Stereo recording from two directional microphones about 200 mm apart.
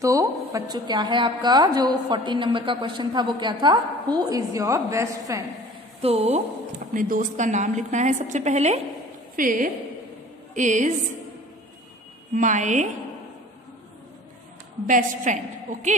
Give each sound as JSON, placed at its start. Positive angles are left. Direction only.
{"t": 0.0, "sound": "a woman's voice", "side_deg": -15}
{"t": 5.9, "sound": "a woman's voice", "side_deg": -30}
{"t": 6.9, "sound": "a woman's voice", "side_deg": -40}
{"t": 12.4, "sound": "a woman's voice", "side_deg": -40}
{"t": 14.9, "sound": "a woman's voice", "side_deg": -40}